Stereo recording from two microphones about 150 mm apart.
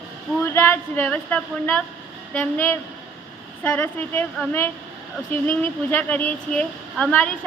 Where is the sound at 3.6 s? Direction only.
10° left (ahead or behind).